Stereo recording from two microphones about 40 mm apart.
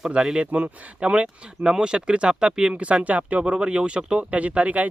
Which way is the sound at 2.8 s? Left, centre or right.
Right.